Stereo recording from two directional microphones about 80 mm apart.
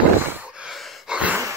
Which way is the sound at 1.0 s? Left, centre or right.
Centre.